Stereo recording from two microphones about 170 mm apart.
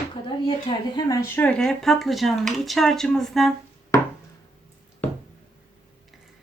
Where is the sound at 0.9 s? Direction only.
20° left (ahead or behind).